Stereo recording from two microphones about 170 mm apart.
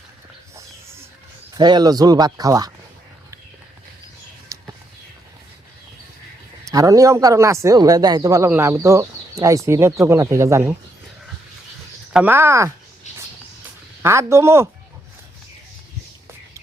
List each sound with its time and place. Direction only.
1.5 s speech: 25° right (ahead or behind)
6.7 s speech: 20° right (ahead or behind)
12.1 s speech: 10° right (ahead or behind)
13.1 s music: 45° left (ahead or behind)
14.0 s speech: 15° right (ahead or behind)